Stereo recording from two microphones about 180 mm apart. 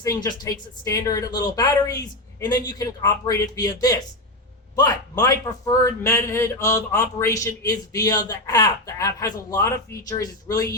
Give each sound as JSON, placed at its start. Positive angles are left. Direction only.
{"t": 0.0, "sound": "a man's voice", "side_deg": 20}